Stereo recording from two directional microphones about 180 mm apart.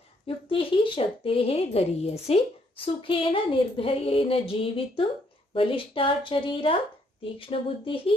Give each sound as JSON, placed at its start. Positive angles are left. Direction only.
{"t": 0.5, "sound": "a woman's voice", "side_deg": 30}